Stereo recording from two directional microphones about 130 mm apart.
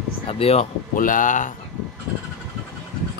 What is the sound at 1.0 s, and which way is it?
Speech, 90° left.